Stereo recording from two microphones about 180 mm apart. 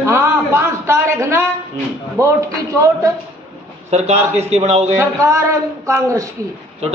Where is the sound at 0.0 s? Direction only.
15° right (ahead or behind).